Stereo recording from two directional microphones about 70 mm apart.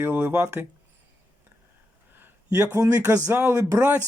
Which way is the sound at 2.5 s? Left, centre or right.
Right.